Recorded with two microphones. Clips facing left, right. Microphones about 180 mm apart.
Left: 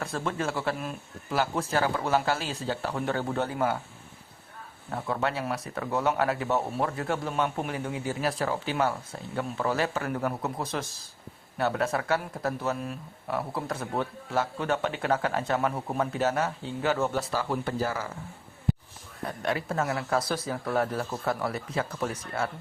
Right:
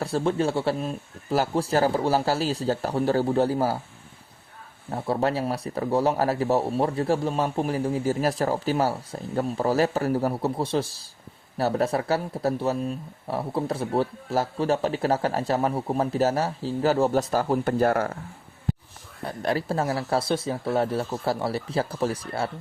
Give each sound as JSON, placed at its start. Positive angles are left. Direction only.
{"t": 0.0, "sound": "speech", "side_deg": -30}
{"t": 4.9, "sound": "speech", "side_deg": -35}
{"t": 19.2, "sound": "speech", "side_deg": -35}